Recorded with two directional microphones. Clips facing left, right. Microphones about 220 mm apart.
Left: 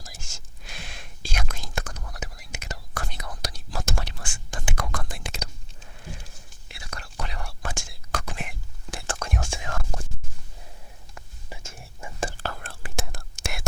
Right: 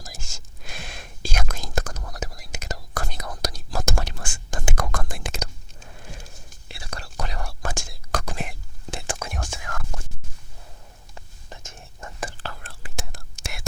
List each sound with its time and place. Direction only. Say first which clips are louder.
0.6 s whispering: right 4 dB; 45° right (ahead or behind)
6.7 s whispering: right 3 dB; 35° right (ahead or behind)
8.9 s whispering: right 2 dB; 20° right (ahead or behind)
9.1 s whispering: left 2 dB; 5° right (ahead or behind)
9.6 s whispering: left 2 dB; 25° left (ahead or behind)
11.4 s whispering: left 1 dB; 10° left (ahead or behind)
12.4 s whispering: left 3 dB; 50° left (ahead or behind)